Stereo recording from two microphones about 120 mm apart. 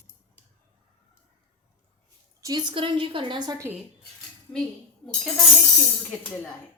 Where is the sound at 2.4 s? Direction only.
35° right (ahead or behind).